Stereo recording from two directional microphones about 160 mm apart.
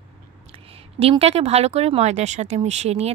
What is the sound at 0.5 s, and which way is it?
A woman's voice, 35° right (ahead or behind).